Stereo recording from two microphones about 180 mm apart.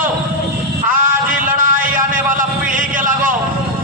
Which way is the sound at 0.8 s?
50° right (ahead or behind).